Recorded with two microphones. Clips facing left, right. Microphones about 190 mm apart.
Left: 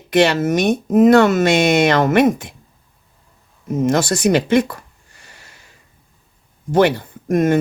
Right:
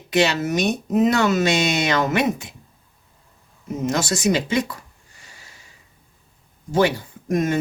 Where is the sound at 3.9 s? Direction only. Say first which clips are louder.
Left 5 dB; 55° left (ahead or behind).